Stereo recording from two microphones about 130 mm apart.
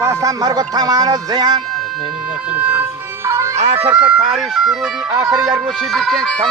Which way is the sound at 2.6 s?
15° right (ahead or behind).